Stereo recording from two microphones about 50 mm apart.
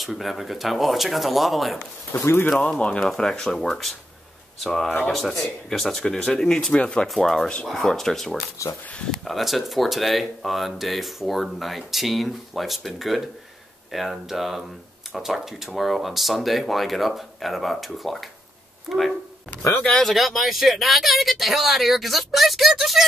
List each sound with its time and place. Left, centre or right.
0.0 s speech: centre
2.1 s speech: left
2.8 s speech: left
3.1 s speech: centre
7.1 s speech: centre
8.6 s speech: left
9.2 s speech: centre
19.8 s speech: centre
20.1 s speech: centre